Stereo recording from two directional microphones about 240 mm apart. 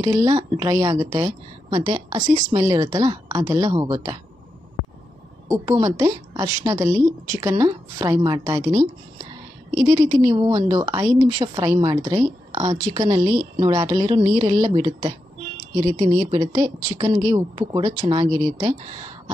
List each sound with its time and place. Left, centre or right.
0.0 s a woman's voice: centre
5.5 s a woman's voice: centre